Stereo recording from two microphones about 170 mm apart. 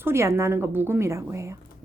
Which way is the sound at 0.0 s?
15° right (ahead or behind).